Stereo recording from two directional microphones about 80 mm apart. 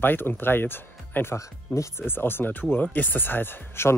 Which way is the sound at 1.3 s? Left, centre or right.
Left.